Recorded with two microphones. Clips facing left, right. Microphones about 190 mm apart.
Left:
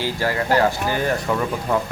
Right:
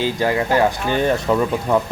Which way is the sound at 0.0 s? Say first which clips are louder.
Right 4 dB; 20° right (ahead or behind).